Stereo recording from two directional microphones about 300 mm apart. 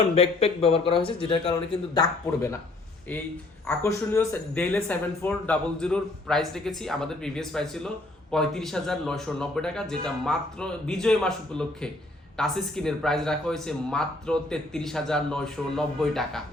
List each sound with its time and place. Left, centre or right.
0.0 s speech: left
3.7 s speech: centre